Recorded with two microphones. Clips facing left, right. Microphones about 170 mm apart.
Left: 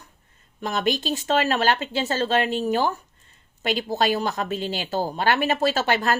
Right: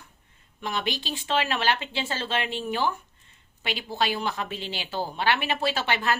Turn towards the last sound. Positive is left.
turn(degrees=40)  # may be behind; listen again after turning